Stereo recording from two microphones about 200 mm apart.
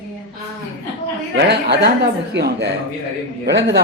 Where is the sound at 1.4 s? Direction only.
55° right (ahead or behind).